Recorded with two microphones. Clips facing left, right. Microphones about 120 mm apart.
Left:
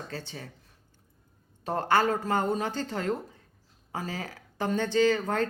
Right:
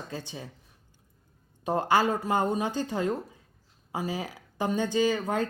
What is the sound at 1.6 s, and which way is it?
A woman's voice, 15° right (ahead or behind).